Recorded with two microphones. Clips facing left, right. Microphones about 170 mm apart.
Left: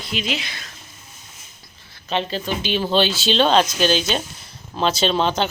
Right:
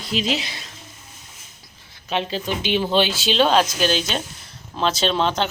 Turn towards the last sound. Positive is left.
turn(degrees=0)  # may be behind; listen again after turning